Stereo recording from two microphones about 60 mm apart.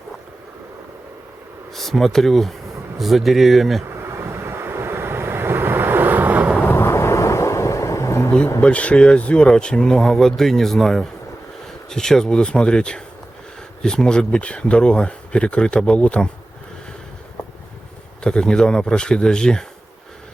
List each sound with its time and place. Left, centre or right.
1.7 s speech: centre
3.8 s vehicle: right
6.7 s thunder: left
8.6 s speech: left
18.2 s speech: centre